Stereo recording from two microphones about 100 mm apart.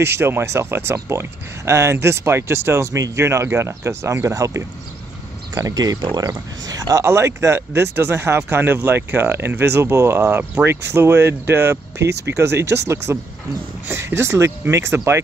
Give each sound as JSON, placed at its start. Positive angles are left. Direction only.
{"t": 0.0, "sound": "speech", "side_deg": -25}
{"t": 7.1, "sound": "speech", "side_deg": -25}